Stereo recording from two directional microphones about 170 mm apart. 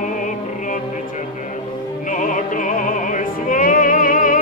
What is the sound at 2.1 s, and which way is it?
Music, 50° left (ahead or behind).